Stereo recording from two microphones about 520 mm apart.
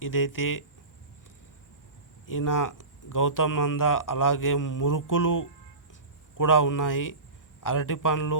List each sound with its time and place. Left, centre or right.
0.0 s speech: left
2.2 s speech: left